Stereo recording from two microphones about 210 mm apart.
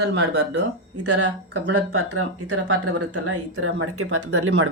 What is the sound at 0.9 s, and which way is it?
Speech, 75° right (ahead or behind).